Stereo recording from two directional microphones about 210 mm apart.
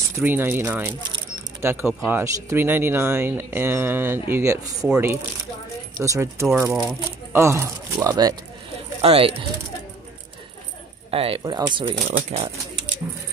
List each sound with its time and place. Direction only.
0.1 s speech: 10° right (ahead or behind)
9.0 s speech: 30° right (ahead or behind)
11.1 s speech: 25° right (ahead or behind)